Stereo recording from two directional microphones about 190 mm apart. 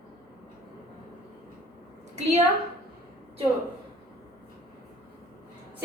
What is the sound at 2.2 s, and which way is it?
Speech, 35° right (ahead or behind).